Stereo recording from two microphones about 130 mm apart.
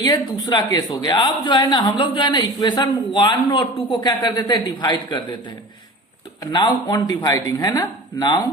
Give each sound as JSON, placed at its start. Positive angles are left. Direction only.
{"t": 0.0, "sound": "a woman's voice", "side_deg": 35}
{"t": 6.5, "sound": "speech", "side_deg": 35}